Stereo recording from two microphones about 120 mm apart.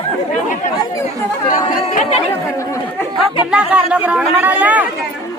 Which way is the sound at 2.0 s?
65° left (ahead or behind).